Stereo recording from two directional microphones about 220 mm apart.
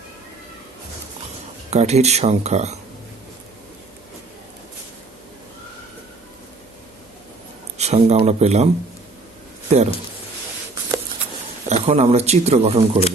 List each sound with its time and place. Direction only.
1.7 s speech: 30° right (ahead or behind)
7.8 s speech: 30° right (ahead or behind)
11.7 s speech: 30° right (ahead or behind)